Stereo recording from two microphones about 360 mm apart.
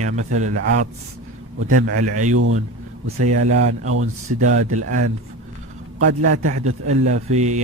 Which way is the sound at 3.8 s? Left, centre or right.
Right.